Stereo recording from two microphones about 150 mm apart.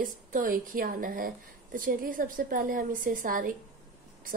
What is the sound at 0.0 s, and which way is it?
A woman's voice, 65° right (ahead or behind).